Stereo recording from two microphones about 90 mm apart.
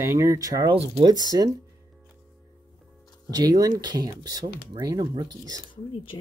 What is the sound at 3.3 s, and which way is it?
Speech, 45° right (ahead or behind).